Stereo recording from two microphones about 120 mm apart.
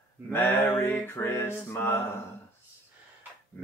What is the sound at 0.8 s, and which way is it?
Music, 20° left (ahead or behind).